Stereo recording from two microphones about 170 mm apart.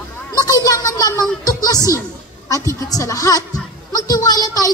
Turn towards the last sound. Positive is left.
turn(degrees=20)  # may be behind; listen again after turning